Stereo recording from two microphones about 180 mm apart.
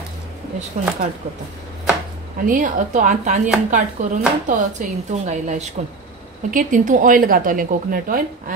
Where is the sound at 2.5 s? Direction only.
45° right (ahead or behind).